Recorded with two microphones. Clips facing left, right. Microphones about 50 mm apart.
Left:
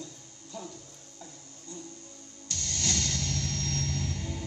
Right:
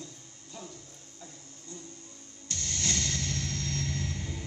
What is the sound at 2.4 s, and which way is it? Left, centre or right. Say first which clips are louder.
Music: even; right.